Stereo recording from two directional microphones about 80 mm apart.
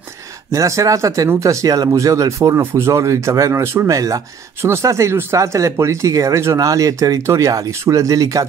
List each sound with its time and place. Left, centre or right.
0.5 s speech: right
4.6 s speech: right